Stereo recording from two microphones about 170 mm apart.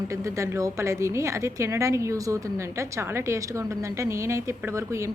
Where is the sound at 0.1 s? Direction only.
15° right (ahead or behind).